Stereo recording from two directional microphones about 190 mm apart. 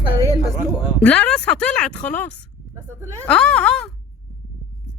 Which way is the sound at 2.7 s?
15° right (ahead or behind).